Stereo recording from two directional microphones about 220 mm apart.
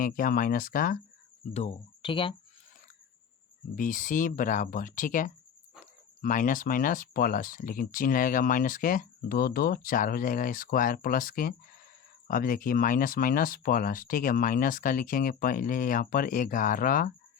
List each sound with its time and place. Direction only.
0.0 s speech: 40° left (ahead or behind)
1.5 s speech: 25° left (ahead or behind)
3.8 s speech: 35° left (ahead or behind)